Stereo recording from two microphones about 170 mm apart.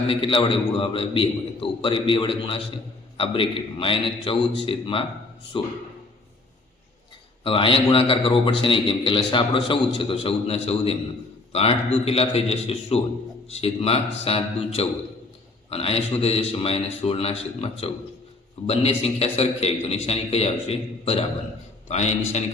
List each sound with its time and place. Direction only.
0.1 s a man's voice: 30° left (ahead or behind)
7.4 s a man's voice: 30° left (ahead or behind)